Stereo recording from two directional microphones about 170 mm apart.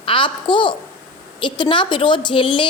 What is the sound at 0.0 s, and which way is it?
A child's voice, 30° left (ahead or behind).